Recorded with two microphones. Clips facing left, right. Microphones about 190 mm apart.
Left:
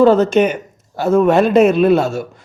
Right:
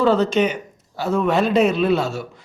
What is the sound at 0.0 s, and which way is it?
A man's voice, 50° left (ahead or behind).